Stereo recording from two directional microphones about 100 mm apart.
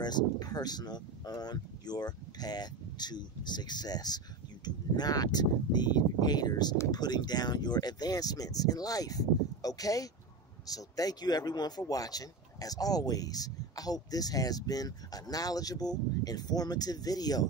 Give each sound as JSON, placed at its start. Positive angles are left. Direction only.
{"t": 0.0, "sound": "speech", "side_deg": 45}